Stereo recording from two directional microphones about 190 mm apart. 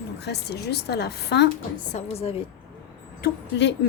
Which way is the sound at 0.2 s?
60° left (ahead or behind).